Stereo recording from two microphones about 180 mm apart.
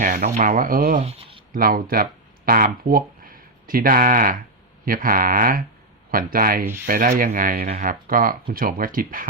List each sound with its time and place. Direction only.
0.0 s speech: 50° right (ahead or behind)